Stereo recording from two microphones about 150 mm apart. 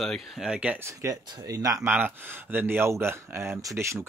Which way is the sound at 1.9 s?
10° right (ahead or behind).